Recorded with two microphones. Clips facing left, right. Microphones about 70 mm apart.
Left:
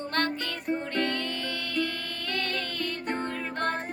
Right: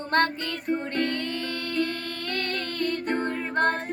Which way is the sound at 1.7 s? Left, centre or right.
Centre.